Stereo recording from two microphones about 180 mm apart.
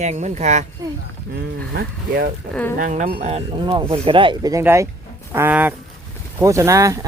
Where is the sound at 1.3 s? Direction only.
70° right (ahead or behind).